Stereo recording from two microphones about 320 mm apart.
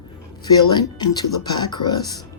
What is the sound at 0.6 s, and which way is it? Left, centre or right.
Speech, centre.